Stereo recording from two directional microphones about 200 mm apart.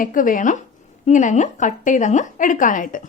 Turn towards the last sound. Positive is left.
turn(degrees=40)  # may be behind; listen again after turning